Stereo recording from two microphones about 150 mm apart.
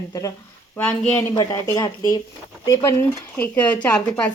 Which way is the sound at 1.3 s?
25° left (ahead or behind).